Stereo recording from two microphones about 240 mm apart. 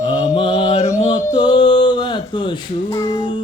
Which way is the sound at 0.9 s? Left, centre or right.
Left.